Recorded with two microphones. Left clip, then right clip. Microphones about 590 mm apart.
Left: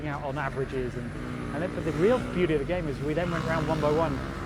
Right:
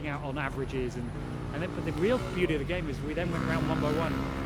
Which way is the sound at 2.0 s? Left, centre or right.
Centre.